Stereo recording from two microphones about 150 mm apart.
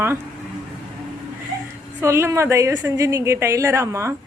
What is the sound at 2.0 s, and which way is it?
A woman's voice, 15° right (ahead or behind).